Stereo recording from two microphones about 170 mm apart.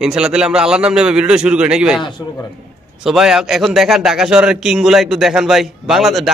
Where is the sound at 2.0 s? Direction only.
25° left (ahead or behind).